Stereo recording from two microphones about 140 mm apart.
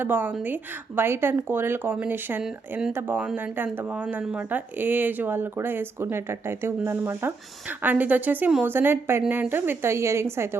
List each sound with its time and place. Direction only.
0.0 s speech: 15° right (ahead or behind)